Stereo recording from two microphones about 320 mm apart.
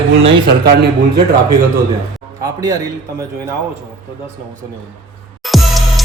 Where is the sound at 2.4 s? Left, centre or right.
Centre.